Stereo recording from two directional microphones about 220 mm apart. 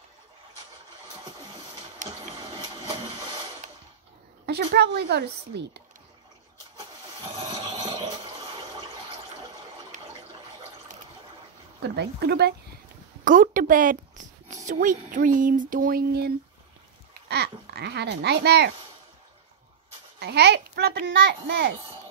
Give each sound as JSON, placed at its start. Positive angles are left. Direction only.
{"t": 2.0, "sound": "printer", "side_deg": -20}
{"t": 4.5, "sound": "a child's voice", "side_deg": -50}
{"t": 7.4, "sound": "a sound", "side_deg": -20}
{"t": 9.9, "sound": "toilet flush", "side_deg": -35}
{"t": 11.8, "sound": "a child's voice", "side_deg": -50}
{"t": 13.2, "sound": "speech", "side_deg": -35}
{"t": 20.2, "sound": "a child's voice", "side_deg": -50}